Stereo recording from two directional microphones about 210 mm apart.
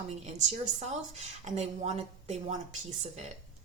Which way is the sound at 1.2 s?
30° right (ahead or behind).